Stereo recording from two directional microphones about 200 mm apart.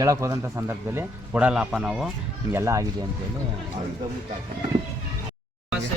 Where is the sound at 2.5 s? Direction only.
15° right (ahead or behind).